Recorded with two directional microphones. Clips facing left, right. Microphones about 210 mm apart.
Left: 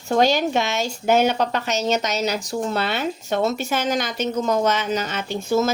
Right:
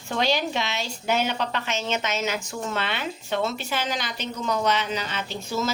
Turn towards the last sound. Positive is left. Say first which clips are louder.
# left 7 dB
turn(degrees=50)  # may be behind; listen again after turning